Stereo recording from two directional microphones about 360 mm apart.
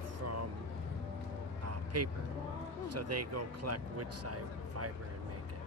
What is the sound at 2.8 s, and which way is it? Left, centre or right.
Speech, right.